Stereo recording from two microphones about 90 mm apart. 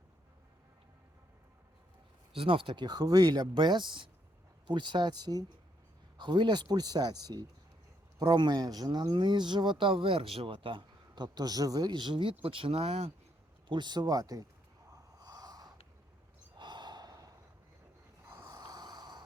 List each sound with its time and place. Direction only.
2.3 s speech: 85° right
13.7 s speech: 55° right (ahead or behind)
15.2 s snort: 45° right (ahead or behind)
16.6 s gasp: 55° right (ahead or behind)
18.3 s a sound: 45° right (ahead or behind)